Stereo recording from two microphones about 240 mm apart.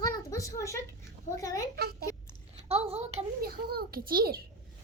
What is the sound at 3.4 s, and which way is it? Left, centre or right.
A child's voice, right.